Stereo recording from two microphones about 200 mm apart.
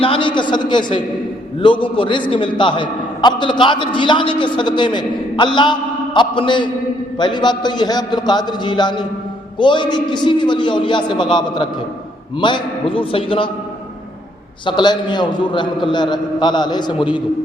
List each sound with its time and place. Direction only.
0.0 s a sound: 25° left (ahead or behind)
1.6 s a man's voice: 25° left (ahead or behind)
14.6 s a man's voice: 25° left (ahead or behind)